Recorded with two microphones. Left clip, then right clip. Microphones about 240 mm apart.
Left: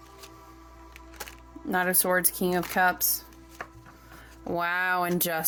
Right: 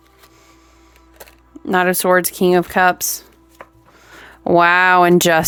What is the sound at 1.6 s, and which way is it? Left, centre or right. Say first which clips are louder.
Speech: right 11 dB; right.